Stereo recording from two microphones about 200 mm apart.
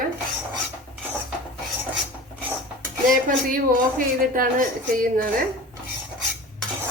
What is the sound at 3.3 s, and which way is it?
A woman's voice, 40° right (ahead or behind).